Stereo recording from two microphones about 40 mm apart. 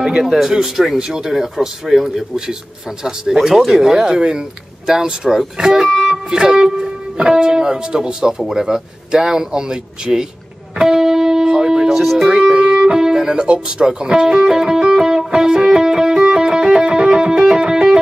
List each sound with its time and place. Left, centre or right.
0.0 s speech: centre
10.8 s music: centre
12.0 s speech: centre
12.5 s music: right